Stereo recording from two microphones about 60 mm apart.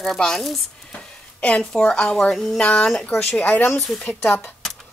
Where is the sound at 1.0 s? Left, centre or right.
Centre.